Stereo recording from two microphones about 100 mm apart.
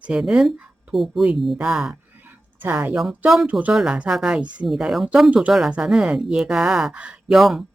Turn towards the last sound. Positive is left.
turn(degrees=0)  # may be behind; listen again after turning